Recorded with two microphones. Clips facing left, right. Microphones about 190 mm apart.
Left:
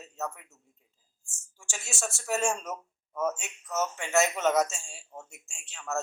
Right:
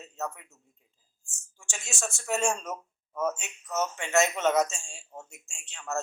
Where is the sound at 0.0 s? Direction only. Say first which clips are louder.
Right 1 dB; 5° left (ahead or behind).